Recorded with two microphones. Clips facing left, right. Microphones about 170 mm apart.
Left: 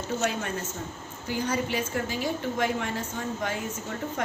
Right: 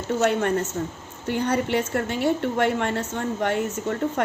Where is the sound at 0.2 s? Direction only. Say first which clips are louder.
Right 8 dB; 60° right (ahead or behind).